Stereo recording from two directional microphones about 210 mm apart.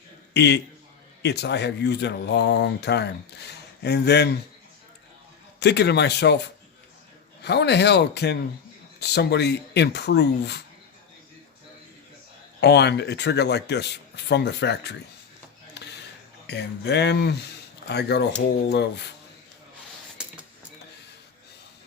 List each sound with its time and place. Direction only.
0.3 s speech: 55° left (ahead or behind)
5.5 s speech: 55° left (ahead or behind)
7.4 s speech: 55° left (ahead or behind)
12.5 s speech: 50° left (ahead or behind)
15.8 s a sound: 55° left (ahead or behind)
16.5 s speech: 55° left (ahead or behind)
20.2 s a sound: 5° right (ahead or behind)